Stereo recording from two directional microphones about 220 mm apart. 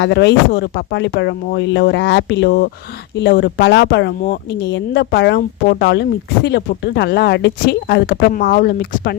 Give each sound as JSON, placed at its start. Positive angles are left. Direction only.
{"t": 0.0, "sound": "speech", "side_deg": 50}